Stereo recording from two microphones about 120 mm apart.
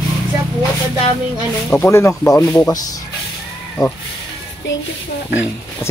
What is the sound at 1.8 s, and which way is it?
Speech, 25° left (ahead or behind).